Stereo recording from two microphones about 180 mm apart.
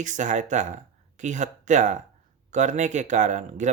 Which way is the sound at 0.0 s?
45° right (ahead or behind).